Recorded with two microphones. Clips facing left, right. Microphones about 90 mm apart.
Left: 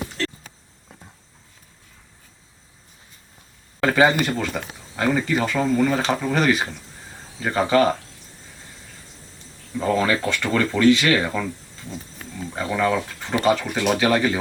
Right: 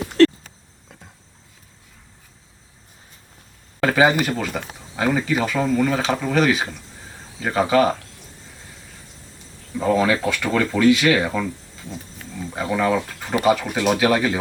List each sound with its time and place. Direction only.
0.2 s a sound: 70° right (ahead or behind)
0.9 s insect: 5° right (ahead or behind)
3.8 s speech: 5° right (ahead or behind)
9.7 s speech: 5° right (ahead or behind)
12.5 s speech: 5° right (ahead or behind)